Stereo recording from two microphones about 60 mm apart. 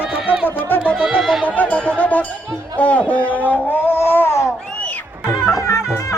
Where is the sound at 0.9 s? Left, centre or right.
Centre.